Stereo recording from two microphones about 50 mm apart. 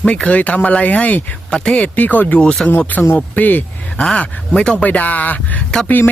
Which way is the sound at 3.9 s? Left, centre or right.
Left.